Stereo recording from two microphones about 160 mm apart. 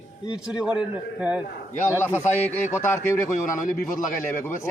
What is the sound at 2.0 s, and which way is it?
Speech, 15° left (ahead or behind).